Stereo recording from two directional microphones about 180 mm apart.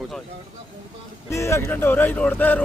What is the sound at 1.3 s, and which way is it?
Speech, 15° left (ahead or behind).